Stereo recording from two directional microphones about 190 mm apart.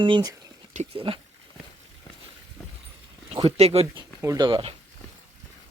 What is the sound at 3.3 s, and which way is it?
Speech, 35° right (ahead or behind).